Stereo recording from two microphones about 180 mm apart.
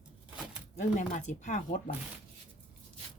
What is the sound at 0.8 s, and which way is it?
Speech, 45° left (ahead or behind).